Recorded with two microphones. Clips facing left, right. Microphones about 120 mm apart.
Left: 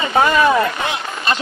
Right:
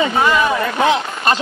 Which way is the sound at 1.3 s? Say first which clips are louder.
Right 3 dB; 45° right (ahead or behind).